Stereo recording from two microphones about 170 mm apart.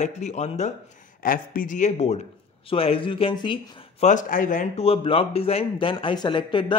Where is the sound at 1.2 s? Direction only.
55° left (ahead or behind); by 3.6 s 30° left (ahead or behind).